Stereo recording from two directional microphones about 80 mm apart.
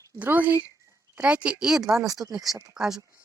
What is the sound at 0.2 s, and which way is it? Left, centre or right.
A woman's voice, right.